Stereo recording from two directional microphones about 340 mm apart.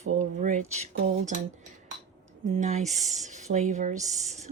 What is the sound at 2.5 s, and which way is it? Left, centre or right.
Speech, centre.